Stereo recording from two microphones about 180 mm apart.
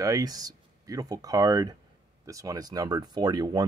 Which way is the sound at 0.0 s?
20° right (ahead or behind).